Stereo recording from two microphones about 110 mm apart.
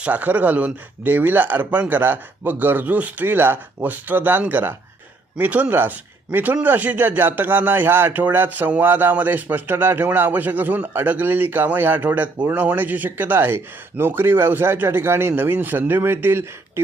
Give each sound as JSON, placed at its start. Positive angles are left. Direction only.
{"t": 0.0, "sound": "a man's voice", "side_deg": -15}